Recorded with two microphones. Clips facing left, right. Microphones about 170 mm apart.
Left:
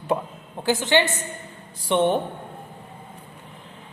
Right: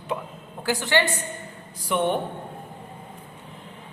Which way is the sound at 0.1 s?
40° left (ahead or behind).